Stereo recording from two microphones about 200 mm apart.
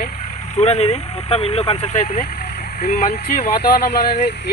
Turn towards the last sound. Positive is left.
turn(degrees=50)  # may be behind; listen again after turning